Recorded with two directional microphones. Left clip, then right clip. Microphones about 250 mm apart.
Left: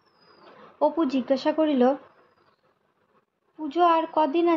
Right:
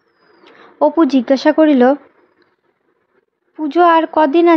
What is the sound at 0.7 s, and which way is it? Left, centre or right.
Speech, right.